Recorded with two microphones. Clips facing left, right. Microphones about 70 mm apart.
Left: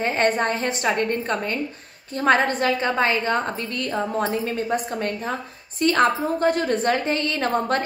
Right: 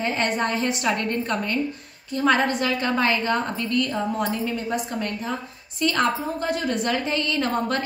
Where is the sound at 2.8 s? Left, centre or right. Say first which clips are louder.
Left 1 dB; left.